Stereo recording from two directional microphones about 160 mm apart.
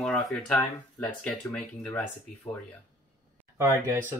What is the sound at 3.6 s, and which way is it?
Speech, 20° right (ahead or behind).